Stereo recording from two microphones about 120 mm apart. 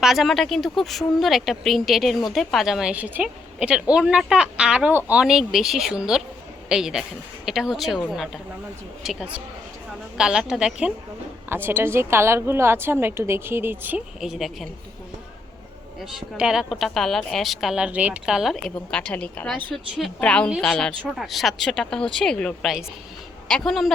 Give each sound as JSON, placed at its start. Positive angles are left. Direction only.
{"t": 0.0, "sound": "a woman's voice", "side_deg": 0}
{"t": 5.2, "sound": "a woman's voice", "side_deg": -5}
{"t": 11.4, "sound": "a woman's voice", "side_deg": -20}
{"t": 14.2, "sound": "speech", "side_deg": -5}
{"t": 16.4, "sound": "speech", "side_deg": -5}
{"t": 19.7, "sound": "speech", "side_deg": 5}